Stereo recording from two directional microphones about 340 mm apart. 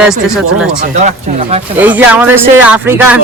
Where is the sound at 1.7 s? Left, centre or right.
Centre.